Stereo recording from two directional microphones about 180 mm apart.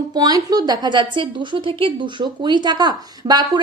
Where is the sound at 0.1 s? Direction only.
20° right (ahead or behind).